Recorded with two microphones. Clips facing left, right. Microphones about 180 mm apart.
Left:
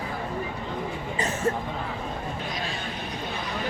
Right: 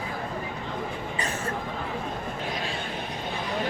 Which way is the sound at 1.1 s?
25° left (ahead or behind).